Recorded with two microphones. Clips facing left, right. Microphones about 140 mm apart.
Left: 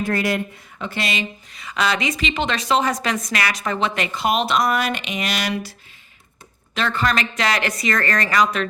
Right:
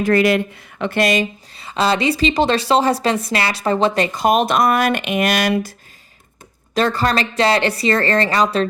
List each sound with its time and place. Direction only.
0.0 s speech: 85° right; by 1.3 s 45° right (ahead or behind)
1.5 s a woman's voice: 30° right (ahead or behind); by 5.7 s 50° right (ahead or behind)
6.7 s a woman's voice: 35° right (ahead or behind)